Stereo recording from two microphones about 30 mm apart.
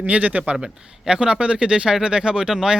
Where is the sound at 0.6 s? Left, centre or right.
Right.